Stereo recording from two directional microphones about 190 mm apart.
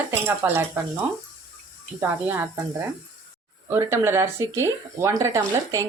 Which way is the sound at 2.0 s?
10° right (ahead or behind).